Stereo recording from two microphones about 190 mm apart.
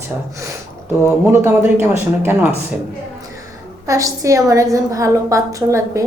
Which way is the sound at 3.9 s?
15° right (ahead or behind).